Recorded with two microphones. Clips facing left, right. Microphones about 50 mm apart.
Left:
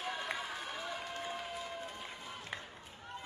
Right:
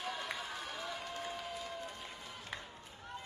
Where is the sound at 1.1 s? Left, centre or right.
Centre.